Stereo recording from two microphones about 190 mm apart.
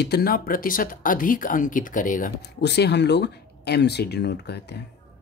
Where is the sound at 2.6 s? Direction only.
65° left (ahead or behind).